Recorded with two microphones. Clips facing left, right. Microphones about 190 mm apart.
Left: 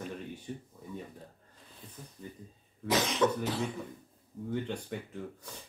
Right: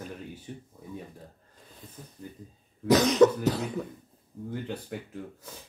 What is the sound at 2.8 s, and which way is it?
Cough, 40° right (ahead or behind).